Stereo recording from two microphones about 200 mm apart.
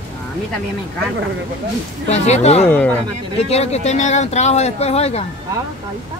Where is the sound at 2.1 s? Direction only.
35° left (ahead or behind).